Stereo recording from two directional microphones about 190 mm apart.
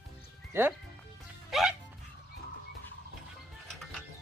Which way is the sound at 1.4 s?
Centre (ahead or behind).